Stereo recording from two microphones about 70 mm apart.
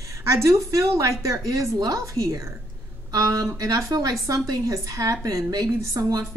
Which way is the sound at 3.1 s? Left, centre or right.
Right.